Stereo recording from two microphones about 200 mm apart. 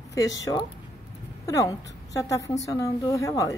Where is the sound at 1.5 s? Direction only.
15° left (ahead or behind).